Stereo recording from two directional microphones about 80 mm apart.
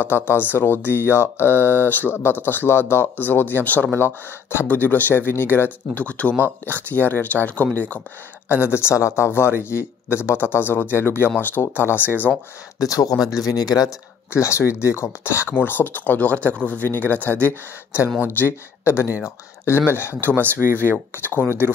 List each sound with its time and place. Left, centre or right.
0.0 s speech: left
8.6 s speech: left
12.7 s speech: left
14.3 s speech: left
18.4 s speech: left
20.2 s speech: right
21.1 s speech: left
21.5 s speech: right